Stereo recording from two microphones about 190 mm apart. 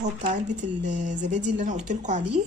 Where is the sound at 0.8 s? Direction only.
40° right (ahead or behind).